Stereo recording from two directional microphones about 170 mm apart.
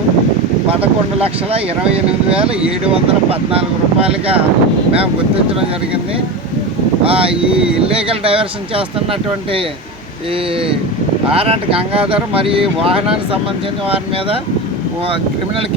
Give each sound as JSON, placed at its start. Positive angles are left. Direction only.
{"t": 2.0, "sound": "speech", "side_deg": -35}
{"t": 7.1, "sound": "speech", "side_deg": -35}
{"t": 11.3, "sound": "speech", "side_deg": -35}